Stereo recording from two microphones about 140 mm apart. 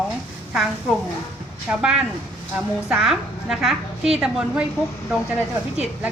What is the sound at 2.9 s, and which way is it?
A woman's voice, 5° right (ahead or behind).